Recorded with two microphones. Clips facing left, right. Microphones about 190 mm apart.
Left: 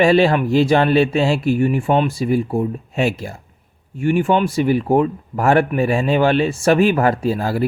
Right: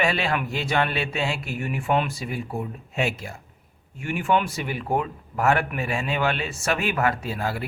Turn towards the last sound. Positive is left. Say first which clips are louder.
# left 10 dB
turn(degrees=35)  # may be behind; listen again after turning